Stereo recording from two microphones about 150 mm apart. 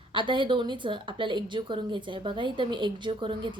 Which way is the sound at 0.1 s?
35° right (ahead or behind).